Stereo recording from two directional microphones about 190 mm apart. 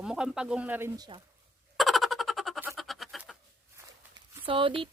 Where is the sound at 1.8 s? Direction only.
Centre (ahead or behind).